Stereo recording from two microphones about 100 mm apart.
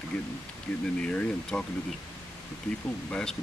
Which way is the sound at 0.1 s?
10° left (ahead or behind).